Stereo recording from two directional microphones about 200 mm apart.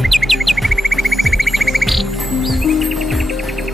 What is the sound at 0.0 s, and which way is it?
Music, centre (ahead or behind).